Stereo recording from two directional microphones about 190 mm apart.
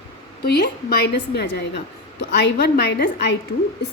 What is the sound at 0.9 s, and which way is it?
A woman's voice, 60° left (ahead or behind).